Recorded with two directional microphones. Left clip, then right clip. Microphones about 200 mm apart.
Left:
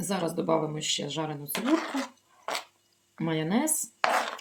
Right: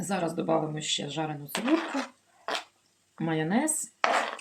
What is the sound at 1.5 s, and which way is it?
Speech, 5° left (ahead or behind).